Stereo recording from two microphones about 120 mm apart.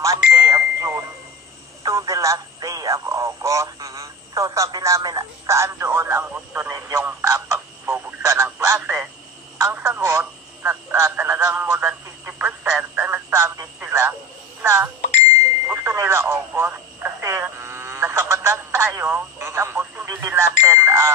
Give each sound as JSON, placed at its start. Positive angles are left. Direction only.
{"t": 0.0, "sound": "doorbell", "side_deg": -30}
{"t": 1.8, "sound": "telephone", "side_deg": -25}
{"t": 14.6, "sound": "speech", "side_deg": -20}
{"t": 15.6, "sound": "radio", "side_deg": -20}